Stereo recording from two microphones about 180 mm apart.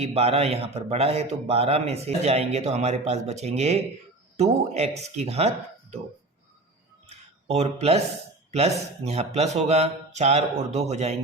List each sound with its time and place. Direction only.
0.0 s a man's voice: 35° right (ahead or behind)
7.1 s a sound: 35° right (ahead or behind)
8.5 s a man's voice: 35° right (ahead or behind)